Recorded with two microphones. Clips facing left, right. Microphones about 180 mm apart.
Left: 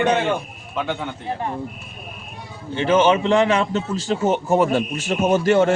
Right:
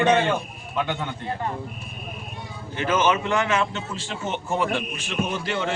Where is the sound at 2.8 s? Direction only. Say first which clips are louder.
Left 6 dB; 30° left (ahead or behind).